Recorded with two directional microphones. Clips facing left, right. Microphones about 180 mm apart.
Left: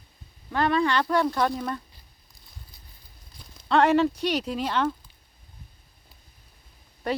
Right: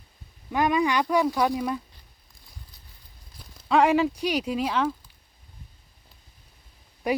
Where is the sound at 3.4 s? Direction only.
5° right (ahead or behind).